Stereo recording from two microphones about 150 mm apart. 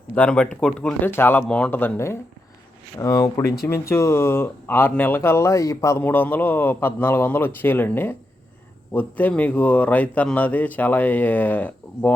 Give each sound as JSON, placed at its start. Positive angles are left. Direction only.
{"t": 0.1, "sound": "a man's voice", "side_deg": 10}